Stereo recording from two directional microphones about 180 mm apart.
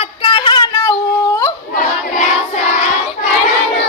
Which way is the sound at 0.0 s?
30° left (ahead or behind).